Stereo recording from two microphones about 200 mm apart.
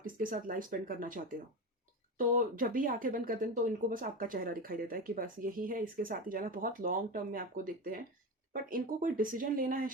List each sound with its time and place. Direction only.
0.0 s speech: 45° right (ahead or behind)